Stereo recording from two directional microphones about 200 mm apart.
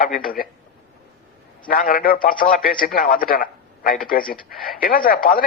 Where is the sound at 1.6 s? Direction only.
45° left (ahead or behind).